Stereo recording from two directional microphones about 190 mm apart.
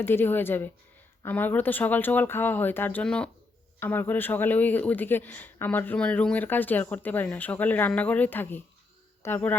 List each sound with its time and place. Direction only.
0.0 s speech: 10° left (ahead or behind)